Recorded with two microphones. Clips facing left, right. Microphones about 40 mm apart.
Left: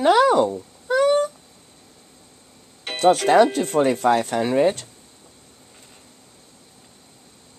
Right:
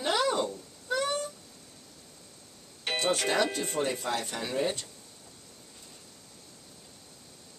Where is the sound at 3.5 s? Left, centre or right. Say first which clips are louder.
Left 11 dB; left.